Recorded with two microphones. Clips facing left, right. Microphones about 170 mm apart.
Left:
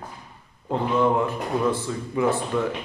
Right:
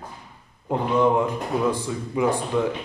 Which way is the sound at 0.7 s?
15° right (ahead or behind).